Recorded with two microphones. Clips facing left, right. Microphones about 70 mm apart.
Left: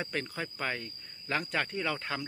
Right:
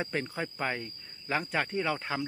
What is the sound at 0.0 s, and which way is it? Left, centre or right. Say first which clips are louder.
Speech: right 2 dB; centre.